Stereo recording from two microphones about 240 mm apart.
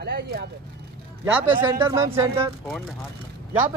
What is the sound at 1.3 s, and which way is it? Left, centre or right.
Speech, centre.